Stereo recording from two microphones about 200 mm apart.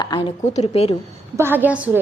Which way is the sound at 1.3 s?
10° right (ahead or behind).